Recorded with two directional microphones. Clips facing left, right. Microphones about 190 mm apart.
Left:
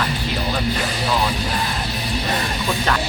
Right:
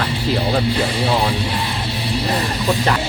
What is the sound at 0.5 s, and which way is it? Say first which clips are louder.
Speech: right 5 dB; 30° right (ahead or behind).